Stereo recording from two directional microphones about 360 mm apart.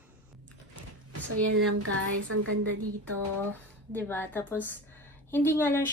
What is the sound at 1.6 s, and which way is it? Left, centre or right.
A woman's voice, right.